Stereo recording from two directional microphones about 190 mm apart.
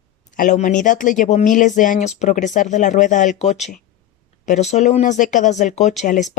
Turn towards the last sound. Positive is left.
turn(degrees=40)  # may be behind; listen again after turning